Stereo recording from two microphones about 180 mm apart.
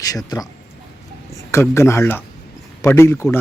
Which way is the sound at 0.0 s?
20° left (ahead or behind).